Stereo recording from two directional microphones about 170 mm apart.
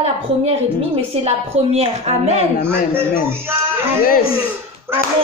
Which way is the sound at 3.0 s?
15° right (ahead or behind).